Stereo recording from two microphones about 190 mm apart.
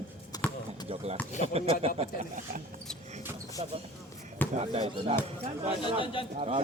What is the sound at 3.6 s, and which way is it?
A man's voice, 25° right (ahead or behind).